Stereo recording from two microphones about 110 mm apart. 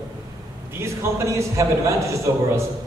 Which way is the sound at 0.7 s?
25° right (ahead or behind).